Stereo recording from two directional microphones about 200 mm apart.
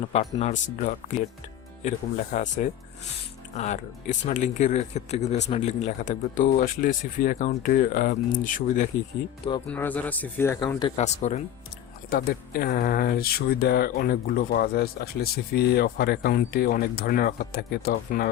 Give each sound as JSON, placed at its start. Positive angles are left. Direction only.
{"t": 0.1, "sound": "speech", "side_deg": 35}
{"t": 2.3, "sound": "speech", "side_deg": 40}
{"t": 9.6, "sound": "speech", "side_deg": 10}
{"t": 10.9, "sound": "speech", "side_deg": 35}
{"t": 12.1, "sound": "speech", "side_deg": 50}